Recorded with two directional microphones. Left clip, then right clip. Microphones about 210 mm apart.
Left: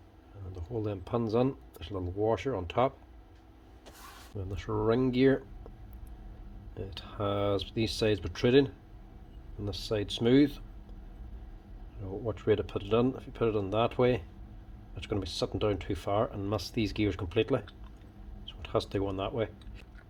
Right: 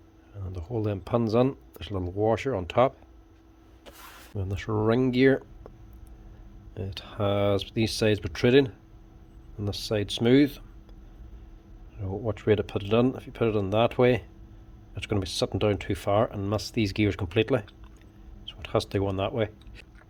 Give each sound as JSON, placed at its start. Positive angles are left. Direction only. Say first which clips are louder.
{"t": 0.5, "sound": "speech", "louder": "right 5 dB", "side_deg": -40}
{"t": 4.4, "sound": "speech", "louder": "right 4 dB", "side_deg": -40}
{"t": 6.7, "sound": "speech", "louder": "right 5 dB", "side_deg": -35}
{"t": 12.0, "sound": "speech", "louder": "right 4 dB", "side_deg": -35}